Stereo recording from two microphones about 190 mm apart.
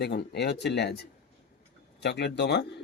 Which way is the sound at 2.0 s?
65° left (ahead or behind).